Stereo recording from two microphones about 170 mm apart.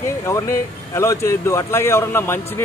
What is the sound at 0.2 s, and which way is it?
Speech, 15° left (ahead or behind).